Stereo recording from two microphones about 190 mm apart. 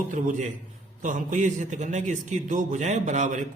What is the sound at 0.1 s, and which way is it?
A man's voice, 45° right (ahead or behind).